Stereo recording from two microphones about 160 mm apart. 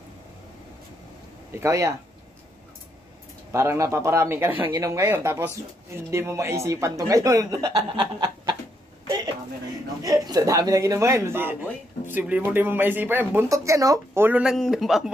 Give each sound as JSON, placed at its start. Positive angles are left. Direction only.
{"t": 1.6, "sound": "speech", "side_deg": -20}
{"t": 3.5, "sound": "speech", "side_deg": -20}
{"t": 10.0, "sound": "speech", "side_deg": -25}